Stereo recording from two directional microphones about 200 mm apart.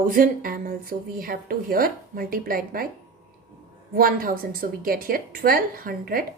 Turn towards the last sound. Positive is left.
turn(degrees=-45)  # may be behind; listen again after turning